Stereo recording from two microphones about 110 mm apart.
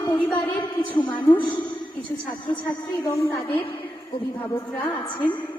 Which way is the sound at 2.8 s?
30° left (ahead or behind).